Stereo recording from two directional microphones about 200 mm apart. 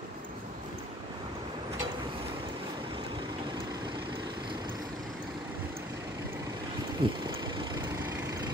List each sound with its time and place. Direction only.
7.0 s vehicle: 25° right (ahead or behind)